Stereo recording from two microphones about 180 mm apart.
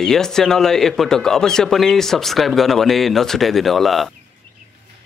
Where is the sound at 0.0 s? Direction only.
5° left (ahead or behind).